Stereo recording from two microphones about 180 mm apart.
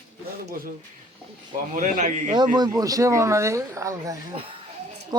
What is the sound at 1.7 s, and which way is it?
Speech, 45° right (ahead or behind).